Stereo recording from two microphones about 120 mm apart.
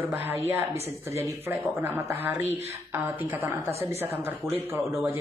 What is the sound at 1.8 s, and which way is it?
Speech, 15° right (ahead or behind).